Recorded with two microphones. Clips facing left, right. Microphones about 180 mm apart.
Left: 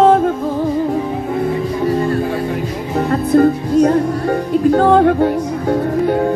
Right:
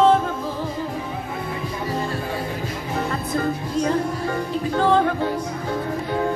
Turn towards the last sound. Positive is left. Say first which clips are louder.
# left 10 dB
turn(degrees=55)  # may be behind; listen again after turning